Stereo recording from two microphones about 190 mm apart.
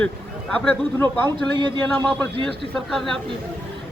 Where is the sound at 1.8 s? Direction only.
5° left (ahead or behind).